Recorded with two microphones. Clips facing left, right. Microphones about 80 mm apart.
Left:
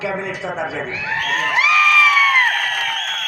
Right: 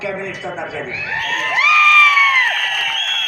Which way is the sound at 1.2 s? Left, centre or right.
Left.